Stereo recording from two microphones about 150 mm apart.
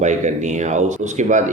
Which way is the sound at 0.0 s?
55° right (ahead or behind).